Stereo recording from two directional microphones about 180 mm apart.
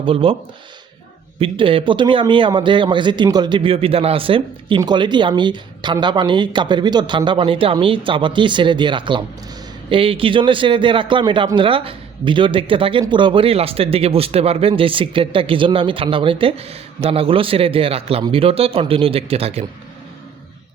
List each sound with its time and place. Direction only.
0.0 s speech: 30° right (ahead or behind)
1.4 s a man's voice: 30° right (ahead or behind)